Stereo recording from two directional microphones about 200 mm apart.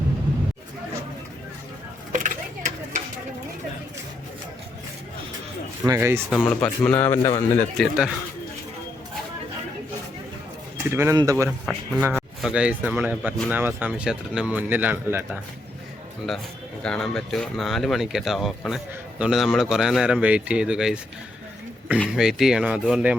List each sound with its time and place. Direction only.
2.1 s a sound: 40° right (ahead or behind)
5.8 s speech: 15° right (ahead or behind)
6.3 s a man's voice: 5° left (ahead or behind)
7.8 s speech: 5° right (ahead or behind)
10.9 s speech: 15° right (ahead or behind)
11.6 s speech: centre (ahead or behind)
16.8 s speech: 5° left (ahead or behind)